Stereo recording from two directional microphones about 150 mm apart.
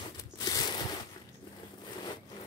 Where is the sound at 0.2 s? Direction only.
25° left (ahead or behind).